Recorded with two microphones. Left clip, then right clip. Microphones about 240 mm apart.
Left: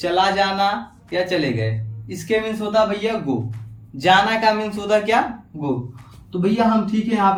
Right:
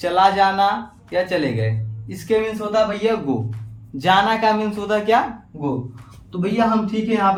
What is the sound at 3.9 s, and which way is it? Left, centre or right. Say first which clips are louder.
Speech: left 1 dB; right.